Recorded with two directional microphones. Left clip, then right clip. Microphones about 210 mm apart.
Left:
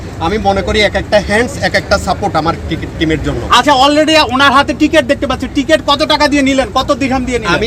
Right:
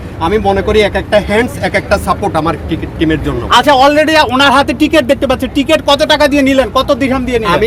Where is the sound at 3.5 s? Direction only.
35° right (ahead or behind).